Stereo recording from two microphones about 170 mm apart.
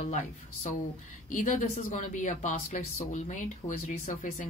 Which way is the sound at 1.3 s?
50° left (ahead or behind).